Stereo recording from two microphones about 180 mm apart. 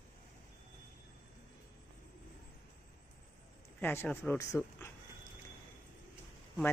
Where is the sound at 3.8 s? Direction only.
10° left (ahead or behind).